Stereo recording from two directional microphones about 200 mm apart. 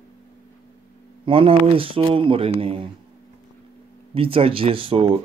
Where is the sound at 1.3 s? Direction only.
25° right (ahead or behind).